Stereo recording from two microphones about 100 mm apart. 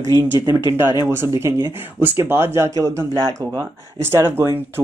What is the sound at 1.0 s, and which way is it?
Speech, 25° right (ahead or behind).